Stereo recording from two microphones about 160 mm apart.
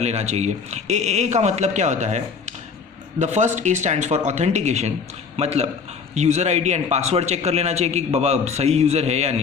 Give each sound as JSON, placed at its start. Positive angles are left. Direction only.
{"t": 0.0, "sound": "a man's voice", "side_deg": -40}